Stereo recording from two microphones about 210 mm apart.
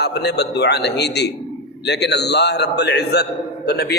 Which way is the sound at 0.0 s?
55° left (ahead or behind).